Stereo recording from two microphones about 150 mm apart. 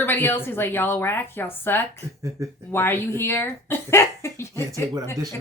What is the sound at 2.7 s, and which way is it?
Speech, 15° left (ahead or behind).